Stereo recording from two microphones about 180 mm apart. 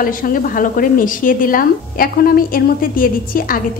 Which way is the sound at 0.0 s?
50° left (ahead or behind).